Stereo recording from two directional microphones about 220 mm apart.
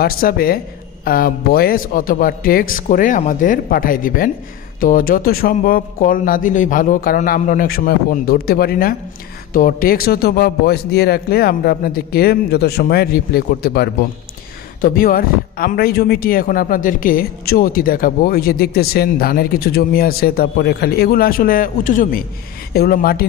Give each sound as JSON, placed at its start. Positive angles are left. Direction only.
{"t": 0.0, "sound": "speech", "side_deg": 40}